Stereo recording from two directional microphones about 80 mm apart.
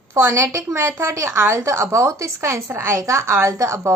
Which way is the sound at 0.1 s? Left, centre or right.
Right.